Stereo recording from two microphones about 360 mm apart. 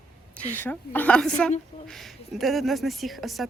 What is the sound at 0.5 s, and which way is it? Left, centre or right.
Speech, centre.